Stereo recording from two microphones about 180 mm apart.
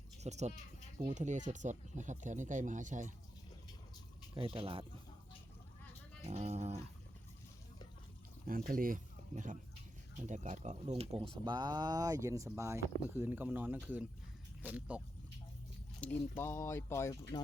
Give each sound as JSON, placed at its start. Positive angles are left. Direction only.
{"t": 0.2, "sound": "speech", "side_deg": -40}
{"t": 4.4, "sound": "speech", "side_deg": -30}
{"t": 6.2, "sound": "speech", "side_deg": -40}
{"t": 8.4, "sound": "speech", "side_deg": -50}
{"t": 16.0, "sound": "speech", "side_deg": 10}